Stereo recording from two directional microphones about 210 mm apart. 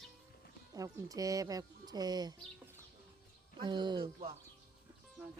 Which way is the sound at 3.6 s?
20° right (ahead or behind).